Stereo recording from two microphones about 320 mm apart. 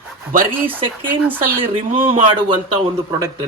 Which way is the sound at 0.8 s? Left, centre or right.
Centre.